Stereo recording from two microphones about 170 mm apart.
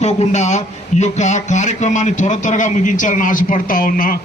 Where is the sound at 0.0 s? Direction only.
40° left (ahead or behind).